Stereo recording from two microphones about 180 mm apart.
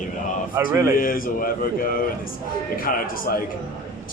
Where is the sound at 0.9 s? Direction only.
50° left (ahead or behind).